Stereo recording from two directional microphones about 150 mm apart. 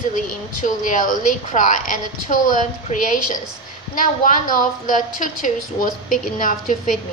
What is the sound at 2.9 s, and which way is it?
Speech, 50° left (ahead or behind).